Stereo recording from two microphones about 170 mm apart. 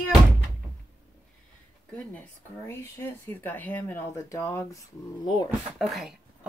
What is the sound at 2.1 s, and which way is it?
Speech, 15° left (ahead or behind).